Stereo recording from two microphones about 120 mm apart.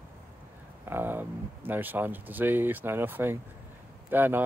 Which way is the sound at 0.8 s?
20° right (ahead or behind).